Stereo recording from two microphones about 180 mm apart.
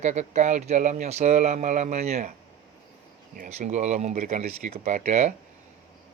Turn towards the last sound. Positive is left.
turn(degrees=-40)  # may be behind; listen again after turning